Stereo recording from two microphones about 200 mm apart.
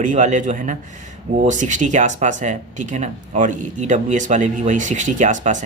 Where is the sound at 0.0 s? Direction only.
40° right (ahead or behind).